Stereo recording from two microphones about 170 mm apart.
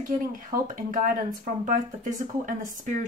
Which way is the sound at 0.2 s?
50° right (ahead or behind).